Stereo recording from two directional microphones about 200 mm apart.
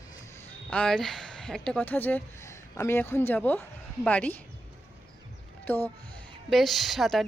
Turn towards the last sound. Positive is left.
turn(degrees=0)  # may be behind; listen again after turning